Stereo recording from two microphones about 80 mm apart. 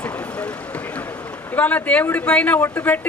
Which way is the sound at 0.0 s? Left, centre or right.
Centre.